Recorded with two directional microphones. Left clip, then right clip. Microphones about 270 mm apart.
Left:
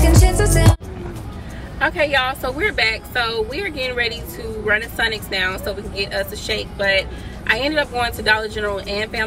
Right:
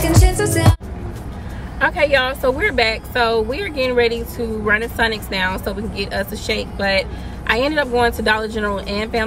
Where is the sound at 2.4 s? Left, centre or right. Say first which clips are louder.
Right 3 dB; centre.